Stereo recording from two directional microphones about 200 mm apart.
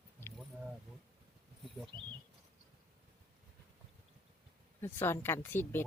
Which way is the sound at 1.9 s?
20° right (ahead or behind).